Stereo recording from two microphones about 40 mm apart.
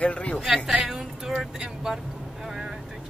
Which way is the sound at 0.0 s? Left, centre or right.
Left.